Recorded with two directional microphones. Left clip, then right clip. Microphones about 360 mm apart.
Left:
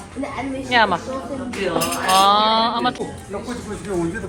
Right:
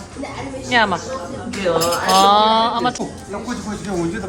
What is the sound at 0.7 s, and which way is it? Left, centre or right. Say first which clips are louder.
Speech: even; centre.